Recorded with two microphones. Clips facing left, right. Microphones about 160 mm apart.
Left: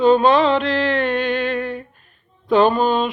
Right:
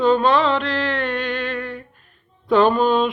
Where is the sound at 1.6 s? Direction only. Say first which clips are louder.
Left 4 dB; 20° left (ahead or behind).